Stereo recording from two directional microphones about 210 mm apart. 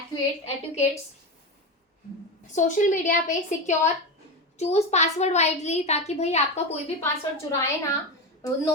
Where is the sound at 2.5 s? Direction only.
35° left (ahead or behind).